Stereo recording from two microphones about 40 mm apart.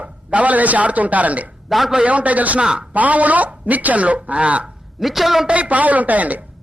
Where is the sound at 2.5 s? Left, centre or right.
Right.